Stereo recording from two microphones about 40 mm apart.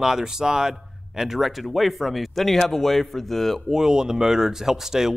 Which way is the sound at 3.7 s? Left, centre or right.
Centre.